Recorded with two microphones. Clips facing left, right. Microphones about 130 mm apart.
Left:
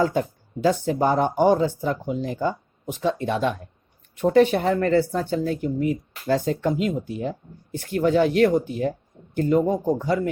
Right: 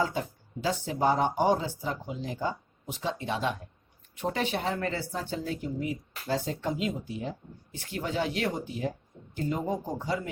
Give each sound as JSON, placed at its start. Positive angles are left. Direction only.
{"t": 0.0, "sound": "a woman's voice", "side_deg": 55}